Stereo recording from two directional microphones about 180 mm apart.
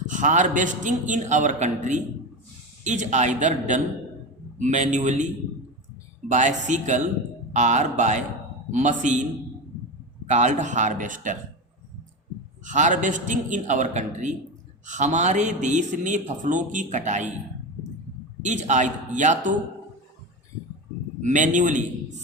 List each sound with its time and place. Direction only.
0.1 s a man's voice: 45° right (ahead or behind)
10.2 s a man's voice: 40° right (ahead or behind)
12.6 s a man's voice: 45° right (ahead or behind)
18.4 s a man's voice: 45° right (ahead or behind)
21.2 s a man's voice: 45° right (ahead or behind)